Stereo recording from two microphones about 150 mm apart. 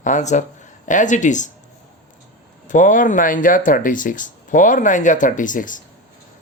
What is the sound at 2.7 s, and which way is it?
Speech, 60° left (ahead or behind).